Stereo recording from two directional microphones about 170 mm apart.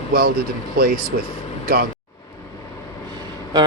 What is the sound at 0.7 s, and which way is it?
Speech, 60° right (ahead or behind).